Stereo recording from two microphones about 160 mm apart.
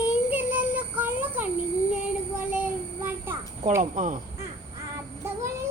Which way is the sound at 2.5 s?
10° right (ahead or behind).